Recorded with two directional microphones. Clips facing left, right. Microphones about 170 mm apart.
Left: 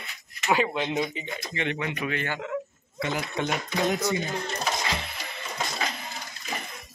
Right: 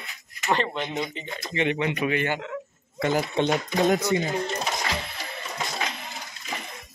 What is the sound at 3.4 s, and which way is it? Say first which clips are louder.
Speech: right 5 dB; 30° right (ahead or behind).